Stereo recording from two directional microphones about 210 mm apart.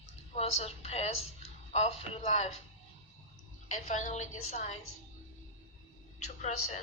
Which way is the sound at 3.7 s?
35° left (ahead or behind).